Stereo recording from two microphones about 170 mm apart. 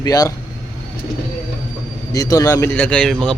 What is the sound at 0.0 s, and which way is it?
Speech, 20° left (ahead or behind).